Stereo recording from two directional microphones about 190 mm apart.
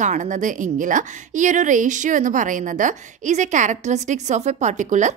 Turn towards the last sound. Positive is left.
turn(degrees=-40)  # may be behind; listen again after turning